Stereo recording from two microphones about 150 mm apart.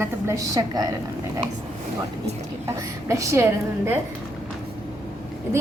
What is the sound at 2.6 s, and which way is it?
A woman's voice, 20° right (ahead or behind).